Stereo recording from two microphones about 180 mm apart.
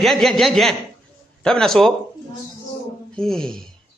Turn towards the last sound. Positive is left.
turn(degrees=5)  # may be behind; listen again after turning